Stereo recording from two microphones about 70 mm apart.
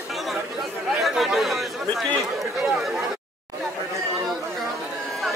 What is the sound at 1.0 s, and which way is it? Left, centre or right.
Chatter, centre.